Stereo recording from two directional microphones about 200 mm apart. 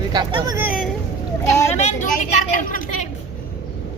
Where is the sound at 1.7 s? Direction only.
35° left (ahead or behind).